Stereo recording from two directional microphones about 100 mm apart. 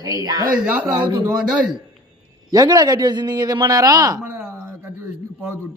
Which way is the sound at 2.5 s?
40° right (ahead or behind).